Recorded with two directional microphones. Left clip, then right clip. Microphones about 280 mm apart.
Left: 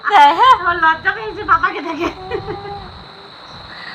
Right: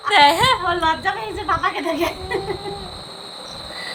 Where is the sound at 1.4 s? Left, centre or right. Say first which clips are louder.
Left 6 dB; right.